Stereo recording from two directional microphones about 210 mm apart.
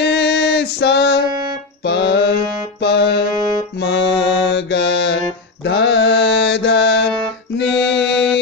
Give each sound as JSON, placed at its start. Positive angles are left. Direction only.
{"t": 0.0, "sound": "female singing", "side_deg": 55}
{"t": 1.9, "sound": "music", "side_deg": 55}
{"t": 3.8, "sound": "mantra", "side_deg": 55}
{"t": 7.5, "sound": "music", "side_deg": 55}
{"t": 8.0, "sound": "music", "side_deg": 0}